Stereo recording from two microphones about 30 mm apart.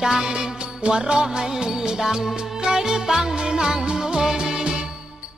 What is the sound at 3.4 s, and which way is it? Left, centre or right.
Music, right.